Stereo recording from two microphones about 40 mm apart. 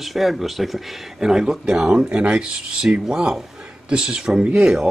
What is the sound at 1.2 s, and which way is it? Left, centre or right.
Speech, centre.